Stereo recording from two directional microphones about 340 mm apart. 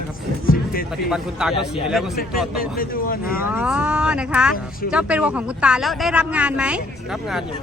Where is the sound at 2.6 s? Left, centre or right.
Left.